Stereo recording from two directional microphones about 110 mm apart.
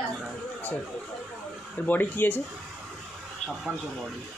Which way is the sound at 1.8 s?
15° left (ahead or behind).